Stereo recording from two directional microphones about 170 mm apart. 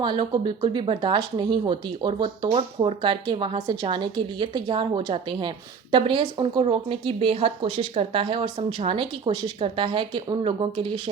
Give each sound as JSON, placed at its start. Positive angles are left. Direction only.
{"t": 0.0, "sound": "speech", "side_deg": -30}